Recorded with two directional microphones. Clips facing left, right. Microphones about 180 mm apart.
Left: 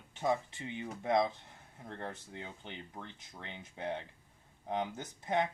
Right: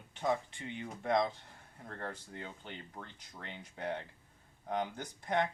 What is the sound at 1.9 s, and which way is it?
Speech, 20° left (ahead or behind).